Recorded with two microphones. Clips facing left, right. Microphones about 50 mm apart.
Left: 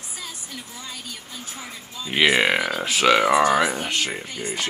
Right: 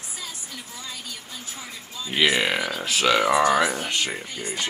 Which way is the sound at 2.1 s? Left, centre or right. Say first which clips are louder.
Left 3 dB; centre.